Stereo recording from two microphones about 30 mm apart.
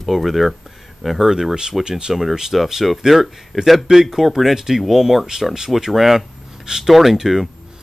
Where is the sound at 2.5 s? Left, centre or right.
Centre.